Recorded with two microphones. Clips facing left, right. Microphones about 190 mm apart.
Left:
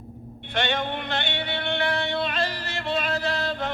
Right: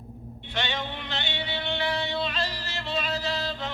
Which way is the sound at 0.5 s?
55° left (ahead or behind).